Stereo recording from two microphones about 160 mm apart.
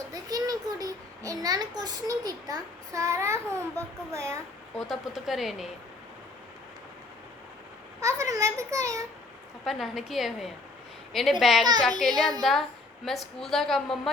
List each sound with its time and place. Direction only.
0.1 s a child's voice: 25° right (ahead or behind)
4.9 s a woman's voice: centre (ahead or behind)
8.0 s a sound: 20° right (ahead or behind)
9.6 s a woman's voice: centre (ahead or behind)